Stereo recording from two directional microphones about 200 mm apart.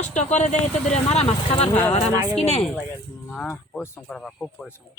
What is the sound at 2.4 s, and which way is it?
Speech, 30° left (ahead or behind).